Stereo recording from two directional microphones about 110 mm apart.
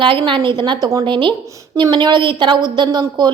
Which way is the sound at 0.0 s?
50° right (ahead or behind).